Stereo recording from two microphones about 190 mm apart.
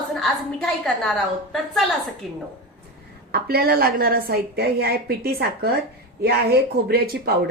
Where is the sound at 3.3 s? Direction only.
55° right (ahead or behind).